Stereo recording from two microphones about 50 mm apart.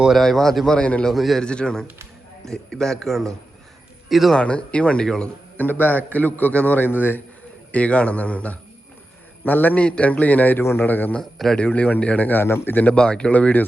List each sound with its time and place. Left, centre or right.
0.2 s a man's voice: centre
0.8 s a man's voice: left
1.1 s a man's voice: centre
1.4 s a man's voice: centre
4.1 s a man's voice: centre
4.4 s a man's voice: left
5.5 s a man's voice: left
7.7 s a man's voice: left
10.6 s a man's voice: left
10.8 s a man's voice: left
11.5 s a man's voice: left
12.4 s a man's voice: left
12.9 s a man's voice: left